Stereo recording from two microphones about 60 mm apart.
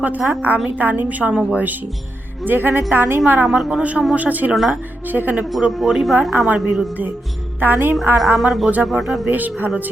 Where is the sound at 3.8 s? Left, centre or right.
Right.